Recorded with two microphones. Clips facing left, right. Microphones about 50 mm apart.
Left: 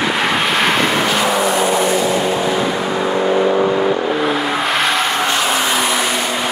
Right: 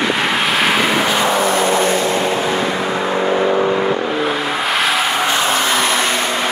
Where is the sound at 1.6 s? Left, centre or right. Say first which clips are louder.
Even; centre.